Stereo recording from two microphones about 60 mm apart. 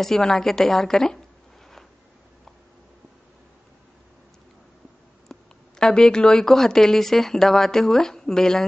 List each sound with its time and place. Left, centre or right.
0.0 s speech: centre
5.3 s speech: centre